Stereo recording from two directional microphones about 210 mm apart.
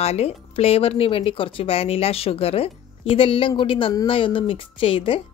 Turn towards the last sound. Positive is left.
turn(degrees=25)  # may be behind; listen again after turning